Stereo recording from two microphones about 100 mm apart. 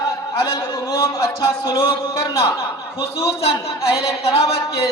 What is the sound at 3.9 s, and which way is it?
Speech, 45° left (ahead or behind).